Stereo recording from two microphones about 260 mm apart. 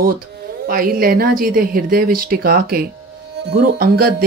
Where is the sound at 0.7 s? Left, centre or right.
Right.